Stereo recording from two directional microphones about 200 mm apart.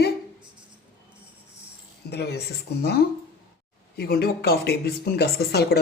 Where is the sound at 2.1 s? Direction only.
55° left (ahead or behind).